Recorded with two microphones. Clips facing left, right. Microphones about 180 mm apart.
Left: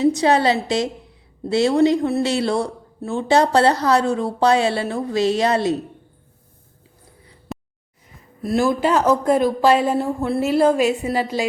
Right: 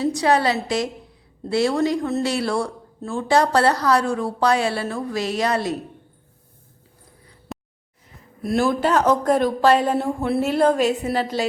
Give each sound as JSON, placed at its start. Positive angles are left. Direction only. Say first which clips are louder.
{"t": 0.0, "sound": "speech", "louder": "left 3 dB", "side_deg": 20}
{"t": 7.5, "sound": "a sound", "louder": "left 3 dB", "side_deg": 0}
{"t": 8.4, "sound": "speech", "louder": "left 1 dB", "side_deg": 0}